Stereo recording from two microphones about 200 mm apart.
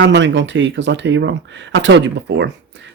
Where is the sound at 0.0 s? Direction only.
65° right (ahead or behind).